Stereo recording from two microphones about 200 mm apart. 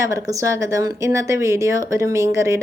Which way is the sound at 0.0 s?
15° right (ahead or behind).